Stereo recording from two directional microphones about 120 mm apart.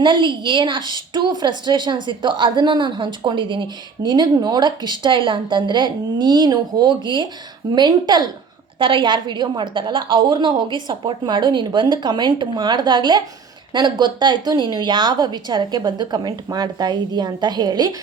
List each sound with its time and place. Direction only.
0.0 s a woman's voice: 40° right (ahead or behind)